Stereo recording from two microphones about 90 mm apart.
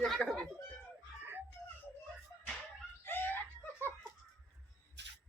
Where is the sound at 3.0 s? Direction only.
25° left (ahead or behind).